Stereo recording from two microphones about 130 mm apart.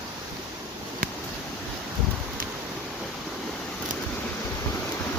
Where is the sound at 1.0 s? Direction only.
90° right.